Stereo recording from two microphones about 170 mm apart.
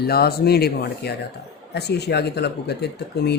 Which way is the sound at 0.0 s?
65° left (ahead or behind).